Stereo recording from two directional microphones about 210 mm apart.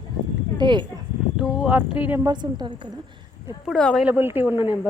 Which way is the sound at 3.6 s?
Centre (ahead or behind).